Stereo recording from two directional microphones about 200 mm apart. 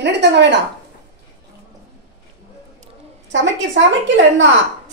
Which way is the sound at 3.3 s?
65° right (ahead or behind).